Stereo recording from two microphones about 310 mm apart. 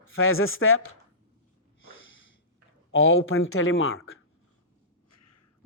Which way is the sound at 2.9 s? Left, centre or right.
Left.